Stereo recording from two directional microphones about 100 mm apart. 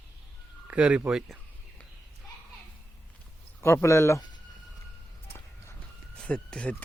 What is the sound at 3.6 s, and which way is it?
Speech, 25° left (ahead or behind).